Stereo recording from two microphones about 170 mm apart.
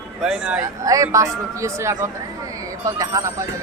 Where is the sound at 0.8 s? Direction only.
20° right (ahead or behind).